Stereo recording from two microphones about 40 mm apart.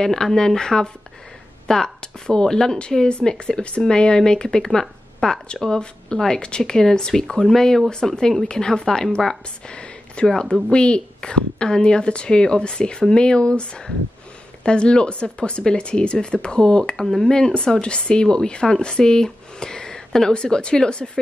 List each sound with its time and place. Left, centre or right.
0.0 s a woman's voice: centre
9.7 s a sound: left
10.2 s a woman's voice: centre
17.0 s speech: centre
17.3 s a woman's voice: centre